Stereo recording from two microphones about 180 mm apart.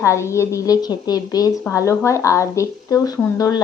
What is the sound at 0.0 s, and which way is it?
Speech, 15° left (ahead or behind).